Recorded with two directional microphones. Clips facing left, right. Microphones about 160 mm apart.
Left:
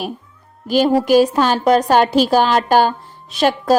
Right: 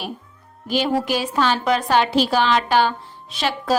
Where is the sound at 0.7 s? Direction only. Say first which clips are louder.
Left 8 dB; 40° left (ahead or behind).